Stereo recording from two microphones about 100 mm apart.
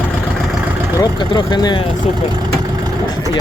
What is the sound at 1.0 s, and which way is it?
Speech, 45° left (ahead or behind).